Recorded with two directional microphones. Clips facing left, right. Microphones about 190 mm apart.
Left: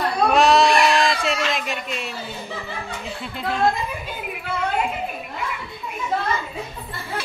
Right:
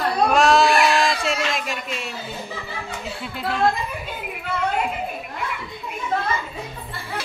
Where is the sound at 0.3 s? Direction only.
Centre (ahead or behind).